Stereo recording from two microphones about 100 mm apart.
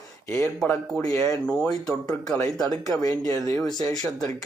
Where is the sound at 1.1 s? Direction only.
30° left (ahead or behind).